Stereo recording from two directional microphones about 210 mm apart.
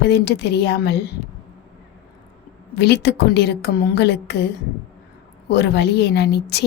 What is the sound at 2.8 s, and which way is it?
A woman's voice, 50° left (ahead or behind).